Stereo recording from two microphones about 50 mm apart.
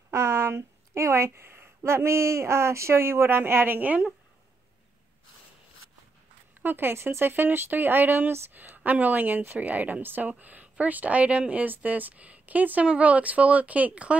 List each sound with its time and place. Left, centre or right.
0.1 s a woman's voice: right
6.6 s speech: right